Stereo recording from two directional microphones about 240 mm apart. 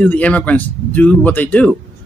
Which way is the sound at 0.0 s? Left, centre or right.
Centre.